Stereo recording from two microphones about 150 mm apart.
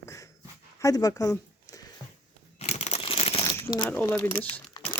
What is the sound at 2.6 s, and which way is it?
Crumpling, 45° left (ahead or behind).